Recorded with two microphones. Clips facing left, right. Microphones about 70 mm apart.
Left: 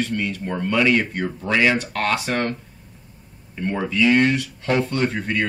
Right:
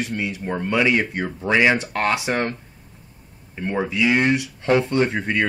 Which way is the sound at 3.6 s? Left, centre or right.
Centre.